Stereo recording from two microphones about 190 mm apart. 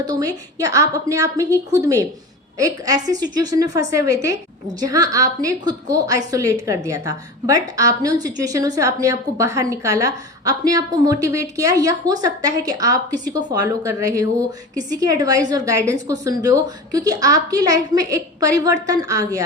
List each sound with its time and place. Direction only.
0.0 s a woman's voice: 20° right (ahead or behind)